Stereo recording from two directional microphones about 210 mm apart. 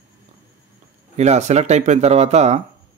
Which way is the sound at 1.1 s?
30° right (ahead or behind).